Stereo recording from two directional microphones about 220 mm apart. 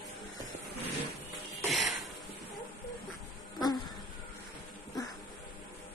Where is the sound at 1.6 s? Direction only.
Centre (ahead or behind).